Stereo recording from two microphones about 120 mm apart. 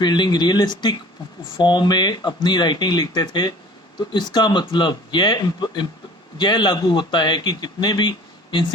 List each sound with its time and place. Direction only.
0.0 s a man's voice: 35° left (ahead or behind)